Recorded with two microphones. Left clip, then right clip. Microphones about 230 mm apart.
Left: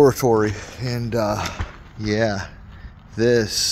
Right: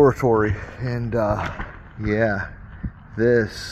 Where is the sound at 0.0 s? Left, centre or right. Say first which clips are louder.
Left 1 dB; left.